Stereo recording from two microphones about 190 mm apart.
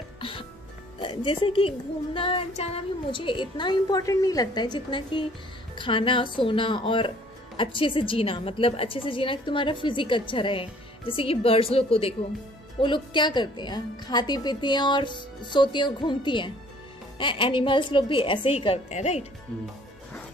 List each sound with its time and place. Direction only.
0.2 s music: 25° left (ahead or behind)
1.0 s a woman's voice: 25° left (ahead or behind)